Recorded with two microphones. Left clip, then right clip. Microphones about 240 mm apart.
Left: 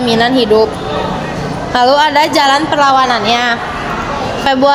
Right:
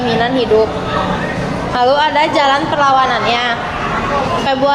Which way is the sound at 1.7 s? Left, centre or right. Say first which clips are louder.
Left 3 dB; left.